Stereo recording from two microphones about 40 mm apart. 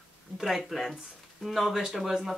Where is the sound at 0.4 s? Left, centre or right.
Centre.